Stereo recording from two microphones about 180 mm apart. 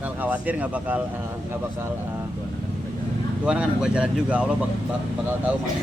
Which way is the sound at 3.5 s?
5° right (ahead or behind).